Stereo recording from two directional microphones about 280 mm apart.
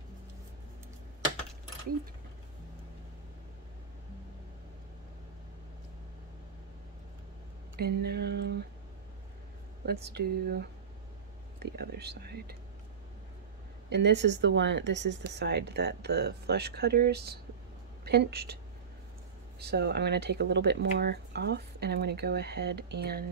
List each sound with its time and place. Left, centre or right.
7.7 s a sound: right
10.0 s speech: right
13.8 s speech: right
19.6 s speech: right